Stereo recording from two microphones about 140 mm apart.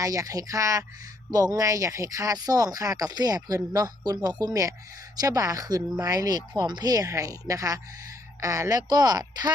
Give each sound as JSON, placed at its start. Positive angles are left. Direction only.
{"t": 0.0, "sound": "speech", "side_deg": -25}